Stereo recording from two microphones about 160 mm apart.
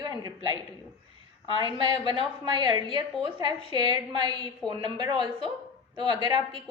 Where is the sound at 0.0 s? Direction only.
25° right (ahead or behind).